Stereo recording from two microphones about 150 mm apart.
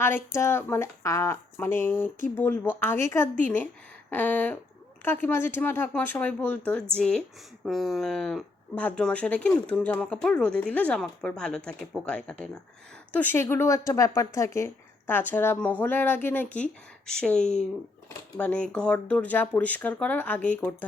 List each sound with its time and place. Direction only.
0.0 s a woman's voice: 15° left (ahead or behind)